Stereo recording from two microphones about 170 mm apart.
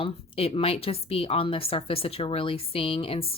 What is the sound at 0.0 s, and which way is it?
A woman's voice, 35° left (ahead or behind).